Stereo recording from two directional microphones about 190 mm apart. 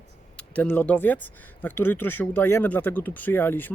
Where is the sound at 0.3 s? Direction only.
10° left (ahead or behind).